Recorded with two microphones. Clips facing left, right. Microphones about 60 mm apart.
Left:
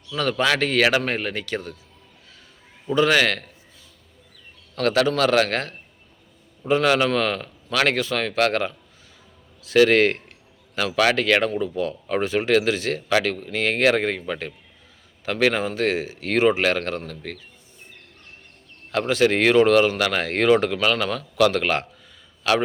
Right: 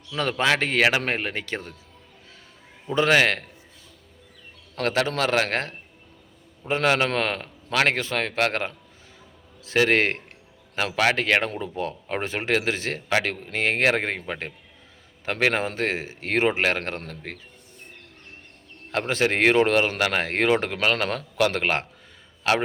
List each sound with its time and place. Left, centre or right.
0.1 s speech: right
2.9 s speech: right
4.7 s speech: right
18.9 s speech: right
20.8 s a man's voice: right